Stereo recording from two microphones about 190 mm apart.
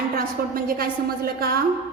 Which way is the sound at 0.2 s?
50° right (ahead or behind).